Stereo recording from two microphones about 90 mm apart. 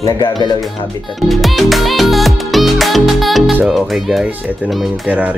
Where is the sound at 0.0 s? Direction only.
50° left (ahead or behind).